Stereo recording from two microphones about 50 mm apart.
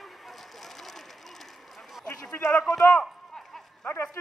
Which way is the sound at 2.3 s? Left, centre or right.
Left.